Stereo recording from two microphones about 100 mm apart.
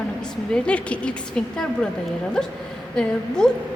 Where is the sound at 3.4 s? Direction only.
5° left (ahead or behind).